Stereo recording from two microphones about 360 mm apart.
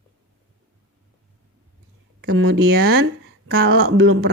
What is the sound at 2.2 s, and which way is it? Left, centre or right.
A woman's voice, right.